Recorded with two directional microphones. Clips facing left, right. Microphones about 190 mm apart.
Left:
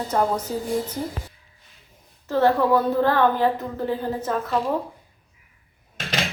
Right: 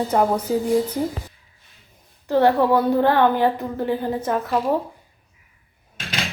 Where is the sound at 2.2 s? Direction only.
15° right (ahead or behind).